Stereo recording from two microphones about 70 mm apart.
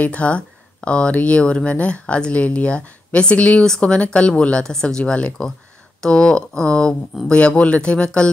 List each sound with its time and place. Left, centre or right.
0.0 s speech: centre